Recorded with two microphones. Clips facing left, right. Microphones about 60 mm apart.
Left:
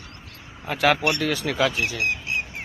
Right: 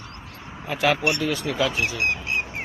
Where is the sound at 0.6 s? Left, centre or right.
Left.